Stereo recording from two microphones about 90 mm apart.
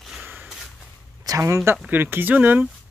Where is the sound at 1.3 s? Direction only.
35° right (ahead or behind).